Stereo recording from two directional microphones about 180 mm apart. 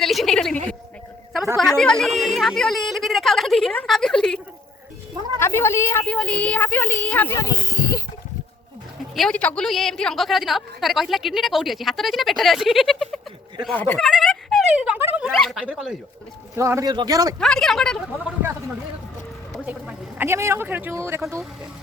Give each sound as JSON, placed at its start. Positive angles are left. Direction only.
{"t": 0.0, "sound": "a sound", "side_deg": 0}
{"t": 1.5, "sound": "a woman's voice", "side_deg": 5}
{"t": 5.4, "sound": "a woman's voice", "side_deg": 15}
{"t": 9.1, "sound": "a woman's voice", "side_deg": 5}
{"t": 16.6, "sound": "speech", "side_deg": -15}
{"t": 17.4, "sound": "a woman's voice", "side_deg": 0}
{"t": 20.1, "sound": "speech", "side_deg": -15}